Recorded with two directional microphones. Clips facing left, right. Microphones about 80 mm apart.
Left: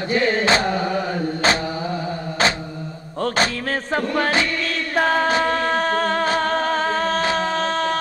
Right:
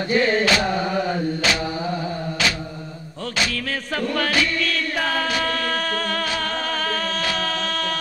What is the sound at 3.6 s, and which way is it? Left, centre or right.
Music, left.